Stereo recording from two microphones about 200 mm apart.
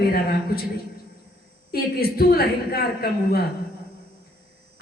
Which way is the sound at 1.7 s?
50° left (ahead or behind).